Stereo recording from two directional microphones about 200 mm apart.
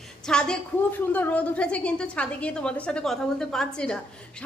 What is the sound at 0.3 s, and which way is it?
A woman's voice, 5° left (ahead or behind).